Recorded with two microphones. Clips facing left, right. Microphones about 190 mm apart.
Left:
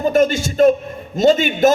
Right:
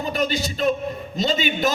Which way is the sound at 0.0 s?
50° left (ahead or behind).